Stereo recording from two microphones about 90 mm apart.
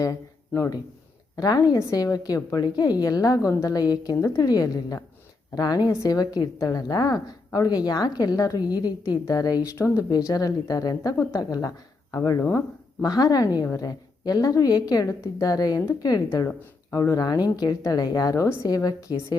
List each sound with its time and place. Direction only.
0.0 s a woman's voice: 40° left (ahead or behind)
9.7 s a woman's voice: 35° left (ahead or behind)
12.4 s speech: 25° left (ahead or behind)
13.0 s a woman's voice: 45° left (ahead or behind)
16.9 s a woman's voice: 40° left (ahead or behind)